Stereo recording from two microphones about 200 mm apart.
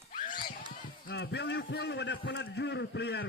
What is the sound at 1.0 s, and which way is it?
A man's voice, 60° left (ahead or behind).